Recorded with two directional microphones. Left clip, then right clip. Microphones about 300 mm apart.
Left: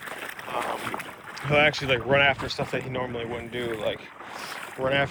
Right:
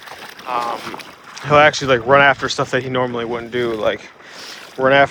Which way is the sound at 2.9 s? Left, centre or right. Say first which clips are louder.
Right 11 dB; right.